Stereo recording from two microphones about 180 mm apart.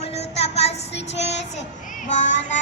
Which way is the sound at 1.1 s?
35° left (ahead or behind).